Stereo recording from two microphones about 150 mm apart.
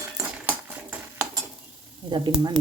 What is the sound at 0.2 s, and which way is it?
Cutlery, 10° right (ahead or behind).